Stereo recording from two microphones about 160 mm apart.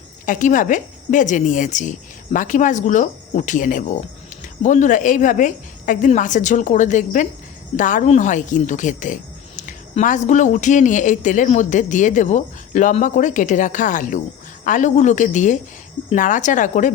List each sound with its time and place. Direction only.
0.3 s speech: 55° left (ahead or behind)